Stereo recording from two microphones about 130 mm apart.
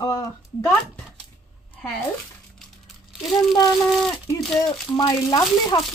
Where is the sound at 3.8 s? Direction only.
5° left (ahead or behind).